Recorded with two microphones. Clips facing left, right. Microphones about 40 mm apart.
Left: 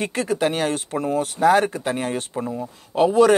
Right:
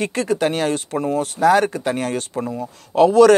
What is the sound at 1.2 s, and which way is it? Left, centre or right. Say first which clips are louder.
Speech: right 2 dB; right.